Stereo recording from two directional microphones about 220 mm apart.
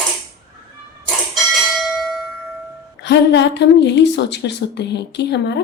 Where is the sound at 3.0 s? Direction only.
50° left (ahead or behind).